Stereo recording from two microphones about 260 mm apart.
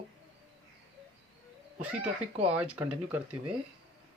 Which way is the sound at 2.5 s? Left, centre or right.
Centre.